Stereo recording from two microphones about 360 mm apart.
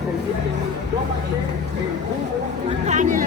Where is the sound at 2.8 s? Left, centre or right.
Right.